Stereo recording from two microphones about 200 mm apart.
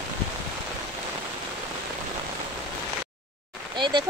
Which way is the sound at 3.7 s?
25° right (ahead or behind).